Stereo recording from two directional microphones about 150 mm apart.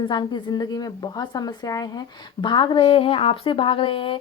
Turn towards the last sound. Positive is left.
turn(degrees=35)  # may be behind; listen again after turning